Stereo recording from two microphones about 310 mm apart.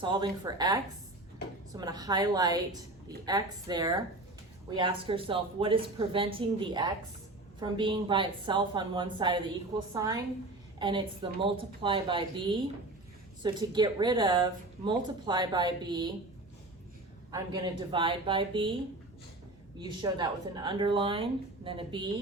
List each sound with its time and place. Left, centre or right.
0.0 s a woman's voice: centre
17.3 s a woman's voice: centre
19.8 s a woman's voice: centre